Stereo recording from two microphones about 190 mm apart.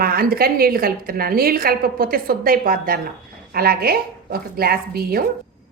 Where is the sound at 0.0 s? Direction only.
50° right (ahead or behind).